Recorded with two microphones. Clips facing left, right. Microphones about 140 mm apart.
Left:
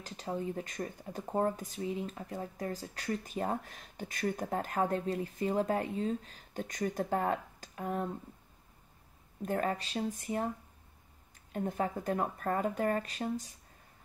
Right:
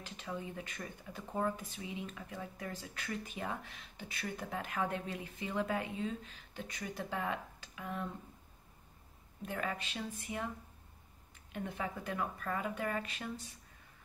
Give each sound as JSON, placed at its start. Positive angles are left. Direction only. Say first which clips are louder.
{"t": 0.0, "sound": "speech", "louder": "left 6 dB", "side_deg": 40}
{"t": 9.4, "sound": "speech", "louder": "left 7 dB", "side_deg": 40}